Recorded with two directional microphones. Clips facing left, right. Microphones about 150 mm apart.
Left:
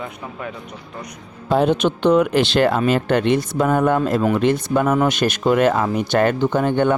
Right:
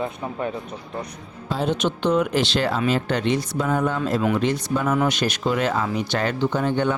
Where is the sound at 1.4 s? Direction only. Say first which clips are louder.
Left 7 dB; 55° left (ahead or behind).